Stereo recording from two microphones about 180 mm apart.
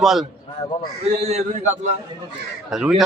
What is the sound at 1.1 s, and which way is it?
Speech, 35° right (ahead or behind).